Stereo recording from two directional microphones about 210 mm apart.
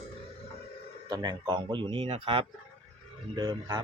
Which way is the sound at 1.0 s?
20° right (ahead or behind).